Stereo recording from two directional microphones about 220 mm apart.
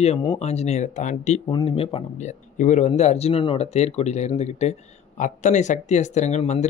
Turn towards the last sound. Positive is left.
turn(degrees=30)  # may be behind; listen again after turning